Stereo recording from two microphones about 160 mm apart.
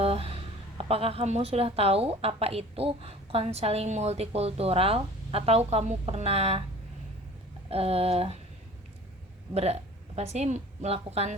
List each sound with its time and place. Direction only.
0.0 s a woman's voice: 40° right (ahead or behind)
7.7 s a woman's voice: 40° right (ahead or behind)
9.6 s a woman's voice: 40° right (ahead or behind)